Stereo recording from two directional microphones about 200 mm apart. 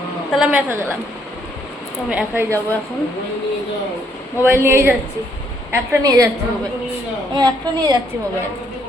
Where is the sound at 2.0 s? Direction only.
5° right (ahead or behind).